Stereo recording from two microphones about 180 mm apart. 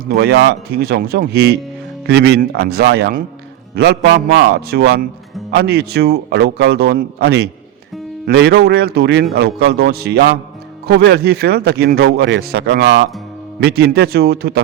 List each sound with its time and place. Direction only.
0.0 s a man's voice: 65° right (ahead or behind)
13.6 s a man's voice: 65° right (ahead or behind)